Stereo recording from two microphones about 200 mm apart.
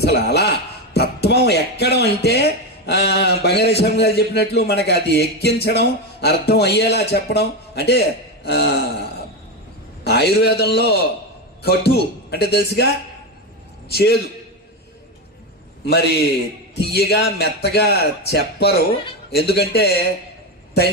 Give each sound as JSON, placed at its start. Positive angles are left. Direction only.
{"t": 0.0, "sound": "speech", "side_deg": 55}
{"t": 10.0, "sound": "a man's voice", "side_deg": 55}
{"t": 15.8, "sound": "a man's voice", "side_deg": 55}